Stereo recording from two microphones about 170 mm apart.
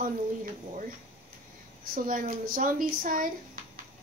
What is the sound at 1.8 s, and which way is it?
Speech, 55° right (ahead or behind).